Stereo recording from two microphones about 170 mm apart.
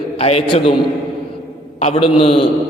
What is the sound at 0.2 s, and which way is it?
Speech, 35° left (ahead or behind).